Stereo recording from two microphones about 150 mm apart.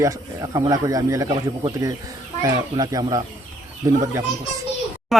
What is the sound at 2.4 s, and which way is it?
Speech, 25° right (ahead or behind).